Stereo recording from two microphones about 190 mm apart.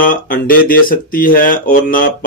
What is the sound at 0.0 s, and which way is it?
Speech, 50° left (ahead or behind).